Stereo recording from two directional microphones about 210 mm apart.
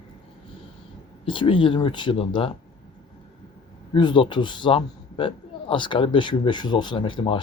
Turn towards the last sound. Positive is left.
turn(degrees=25)  # may be behind; listen again after turning